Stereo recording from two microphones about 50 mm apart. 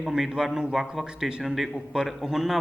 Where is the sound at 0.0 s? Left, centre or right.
Centre.